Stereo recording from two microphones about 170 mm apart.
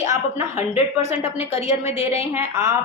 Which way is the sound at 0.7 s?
40° left (ahead or behind).